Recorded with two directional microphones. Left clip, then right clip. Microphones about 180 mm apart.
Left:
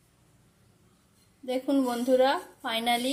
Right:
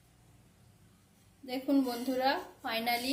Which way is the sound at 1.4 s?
40° left (ahead or behind).